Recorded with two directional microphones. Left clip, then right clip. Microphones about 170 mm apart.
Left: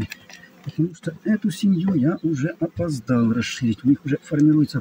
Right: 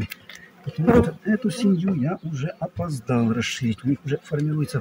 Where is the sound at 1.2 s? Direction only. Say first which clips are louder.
Even; 15° right (ahead or behind).